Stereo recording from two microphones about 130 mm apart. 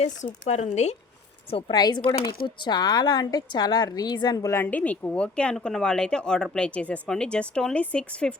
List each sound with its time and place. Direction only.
0.4 s speech: 60° left (ahead or behind)
1.5 s a woman's voice: 45° left (ahead or behind)
1.7 s speech: 30° left (ahead or behind); by 8.4 s 10° left (ahead or behind)